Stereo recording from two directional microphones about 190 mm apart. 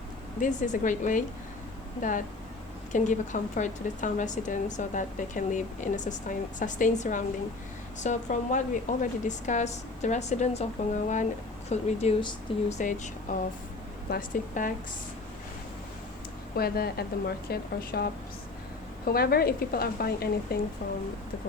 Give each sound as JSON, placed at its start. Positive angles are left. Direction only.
{"t": 0.3, "sound": "a woman's voice", "side_deg": 40}
{"t": 14.1, "sound": "a woman's voice", "side_deg": 45}
{"t": 16.6, "sound": "a woman's voice", "side_deg": 55}